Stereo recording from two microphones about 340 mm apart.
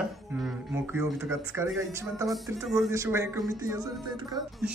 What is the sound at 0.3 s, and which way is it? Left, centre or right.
Speech, centre.